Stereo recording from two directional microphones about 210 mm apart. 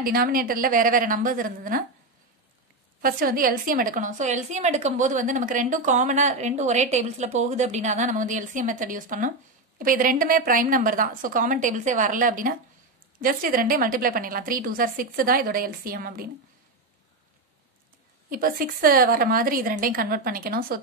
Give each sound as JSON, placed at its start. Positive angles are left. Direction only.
{"t": 0.0, "sound": "a woman's voice", "side_deg": -45}
{"t": 3.0, "sound": "a woman's voice", "side_deg": -45}
{"t": 18.3, "sound": "a woman's voice", "side_deg": -45}